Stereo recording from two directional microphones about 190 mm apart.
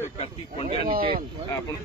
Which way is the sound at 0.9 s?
30° right (ahead or behind).